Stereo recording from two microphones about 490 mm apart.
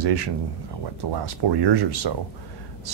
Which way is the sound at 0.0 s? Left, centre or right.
Right.